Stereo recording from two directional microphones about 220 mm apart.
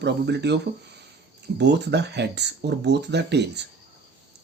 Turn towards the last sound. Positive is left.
turn(degrees=-50)  # may be behind; listen again after turning